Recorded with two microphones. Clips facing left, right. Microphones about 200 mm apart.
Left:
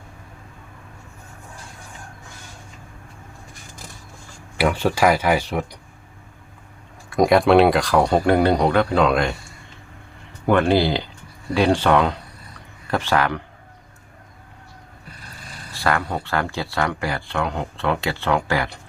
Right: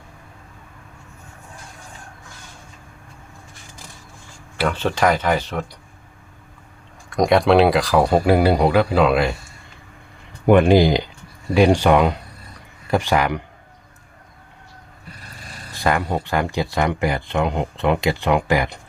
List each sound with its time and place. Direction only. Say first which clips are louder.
4.5 s speech: left 2 dB; 10° left (ahead or behind)
7.1 s speech: even; centre (ahead or behind)
10.4 s speech: right 4 dB; 15° right (ahead or behind)
15.7 s speech: right 2 dB; 15° right (ahead or behind)